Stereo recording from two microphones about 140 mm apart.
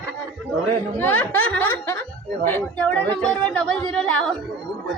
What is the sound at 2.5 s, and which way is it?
Speech, 10° left (ahead or behind).